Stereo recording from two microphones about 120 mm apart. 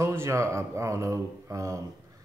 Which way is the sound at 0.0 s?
20° right (ahead or behind).